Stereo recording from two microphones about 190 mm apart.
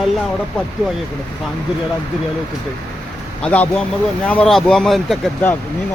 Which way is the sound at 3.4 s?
5° left (ahead or behind).